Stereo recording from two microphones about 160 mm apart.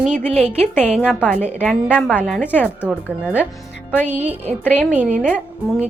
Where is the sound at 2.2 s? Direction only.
Centre (ahead or behind).